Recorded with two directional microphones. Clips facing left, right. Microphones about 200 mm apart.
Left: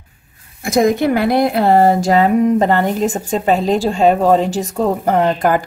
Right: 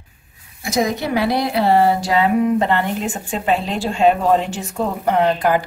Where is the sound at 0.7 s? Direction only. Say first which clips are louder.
Left 6 dB; 50° left (ahead or behind).